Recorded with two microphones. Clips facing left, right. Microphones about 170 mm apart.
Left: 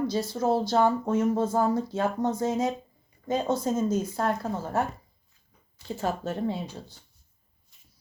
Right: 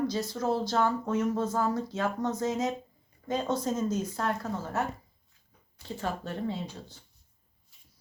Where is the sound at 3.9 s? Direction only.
10° left (ahead or behind).